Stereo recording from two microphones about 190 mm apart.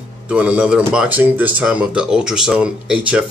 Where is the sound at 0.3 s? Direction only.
5° right (ahead or behind).